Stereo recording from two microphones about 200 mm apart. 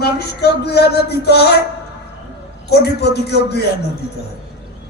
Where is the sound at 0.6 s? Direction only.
55° left (ahead or behind).